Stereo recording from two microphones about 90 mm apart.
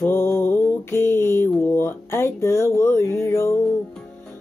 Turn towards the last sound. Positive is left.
turn(degrees=30)  # may be behind; listen again after turning